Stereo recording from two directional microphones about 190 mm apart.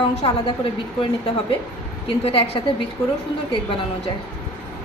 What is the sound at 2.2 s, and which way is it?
Speech, 30° left (ahead or behind).